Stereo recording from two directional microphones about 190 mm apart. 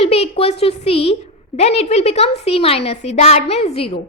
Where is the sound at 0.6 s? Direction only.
30° left (ahead or behind).